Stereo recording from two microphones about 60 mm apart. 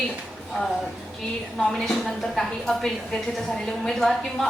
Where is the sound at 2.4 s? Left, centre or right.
Centre.